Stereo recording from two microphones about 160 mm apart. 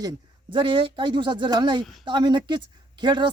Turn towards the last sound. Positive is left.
turn(degrees=-30)  # may be behind; listen again after turning